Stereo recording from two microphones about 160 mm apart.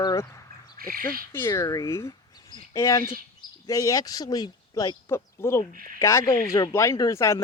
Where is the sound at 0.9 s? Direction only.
65° right (ahead or behind).